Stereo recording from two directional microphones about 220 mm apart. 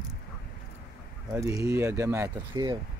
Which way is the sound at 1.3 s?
15° right (ahead or behind).